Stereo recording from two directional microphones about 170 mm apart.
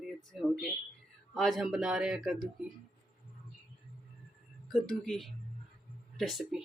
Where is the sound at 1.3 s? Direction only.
Centre (ahead or behind).